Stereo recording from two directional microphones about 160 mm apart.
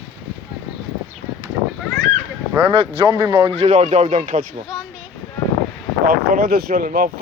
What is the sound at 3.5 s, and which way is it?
Speech, 45° right (ahead or behind).